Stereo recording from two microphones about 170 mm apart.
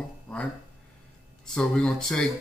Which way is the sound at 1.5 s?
5° left (ahead or behind).